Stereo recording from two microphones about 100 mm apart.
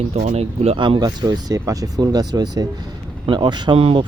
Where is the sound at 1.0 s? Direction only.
40° right (ahead or behind).